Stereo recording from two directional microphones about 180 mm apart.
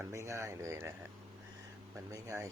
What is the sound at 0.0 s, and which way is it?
Speech, 15° right (ahead or behind).